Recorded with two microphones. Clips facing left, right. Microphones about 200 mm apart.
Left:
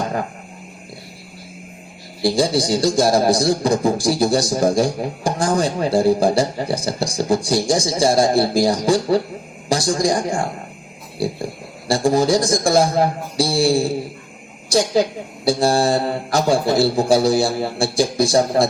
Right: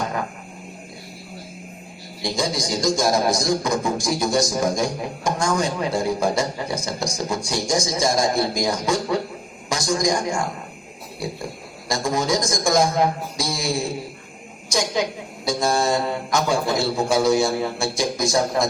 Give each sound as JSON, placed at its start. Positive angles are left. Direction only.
{"t": 2.2, "sound": "a man's voice", "side_deg": 30}